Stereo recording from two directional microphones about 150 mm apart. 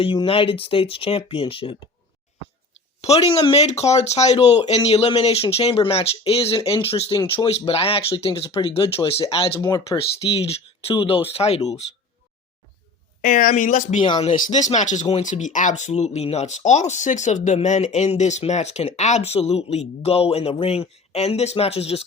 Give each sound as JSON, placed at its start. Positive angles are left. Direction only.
{"t": 0.0, "sound": "speech", "side_deg": 35}
{"t": 3.0, "sound": "speech", "side_deg": 45}
{"t": 9.6, "sound": "speech", "side_deg": 25}
{"t": 10.0, "sound": "speech", "side_deg": 40}
{"t": 13.2, "sound": "speech", "side_deg": 60}
{"t": 14.0, "sound": "speech", "side_deg": 35}
{"t": 14.3, "sound": "speech", "side_deg": 60}